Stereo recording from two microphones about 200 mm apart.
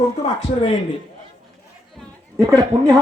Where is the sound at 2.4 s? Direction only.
15° right (ahead or behind).